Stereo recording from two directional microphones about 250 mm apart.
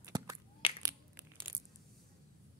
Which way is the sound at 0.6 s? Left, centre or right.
Left.